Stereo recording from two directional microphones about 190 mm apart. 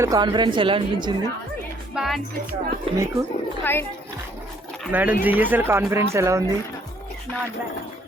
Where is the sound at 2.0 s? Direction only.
Centre (ahead or behind).